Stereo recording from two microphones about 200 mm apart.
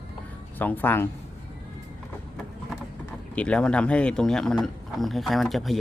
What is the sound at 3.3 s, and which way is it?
Speech, 5° left (ahead or behind).